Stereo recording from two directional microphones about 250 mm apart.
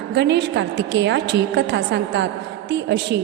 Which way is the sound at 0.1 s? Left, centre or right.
Right.